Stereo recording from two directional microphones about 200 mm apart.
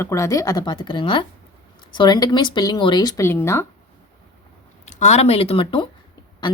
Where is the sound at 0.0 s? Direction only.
15° left (ahead or behind).